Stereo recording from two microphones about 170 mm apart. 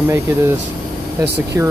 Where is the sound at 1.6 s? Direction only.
15° right (ahead or behind).